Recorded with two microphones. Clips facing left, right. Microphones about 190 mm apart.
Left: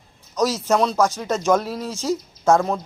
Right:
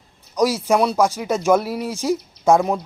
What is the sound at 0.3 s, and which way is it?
Speech, 10° right (ahead or behind).